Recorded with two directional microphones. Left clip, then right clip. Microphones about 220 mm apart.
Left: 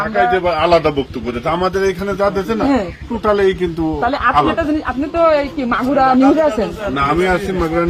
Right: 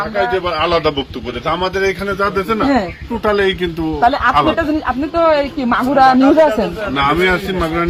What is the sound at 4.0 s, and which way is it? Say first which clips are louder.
A man's voice: right 2 dB; 45° right (ahead or behind).